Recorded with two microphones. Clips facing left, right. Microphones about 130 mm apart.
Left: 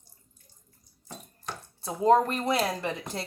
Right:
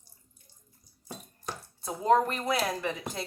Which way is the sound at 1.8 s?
30° left (ahead or behind).